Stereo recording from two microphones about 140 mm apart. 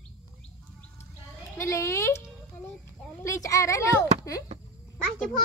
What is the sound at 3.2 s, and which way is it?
Speech, 20° left (ahead or behind).